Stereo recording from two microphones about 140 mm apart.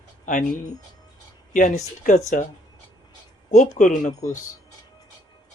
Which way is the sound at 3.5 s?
60° left (ahead or behind).